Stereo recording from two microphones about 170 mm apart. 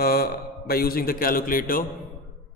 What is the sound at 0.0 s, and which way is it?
A man's voice, 65° left (ahead or behind).